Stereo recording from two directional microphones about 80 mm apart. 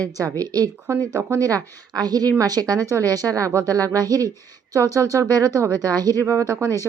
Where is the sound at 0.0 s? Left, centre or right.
Right.